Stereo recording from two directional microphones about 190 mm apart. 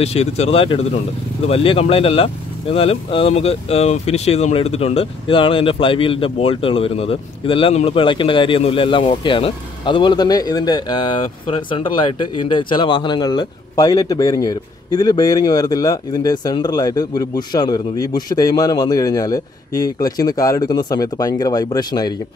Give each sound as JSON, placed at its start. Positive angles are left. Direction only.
{"t": 0.0, "sound": "speech", "side_deg": 35}